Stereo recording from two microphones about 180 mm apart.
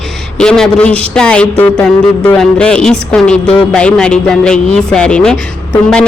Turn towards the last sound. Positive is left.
turn(degrees=5)  # may be behind; listen again after turning